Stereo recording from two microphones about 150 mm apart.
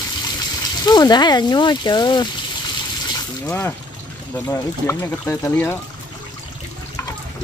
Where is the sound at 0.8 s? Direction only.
25° left (ahead or behind).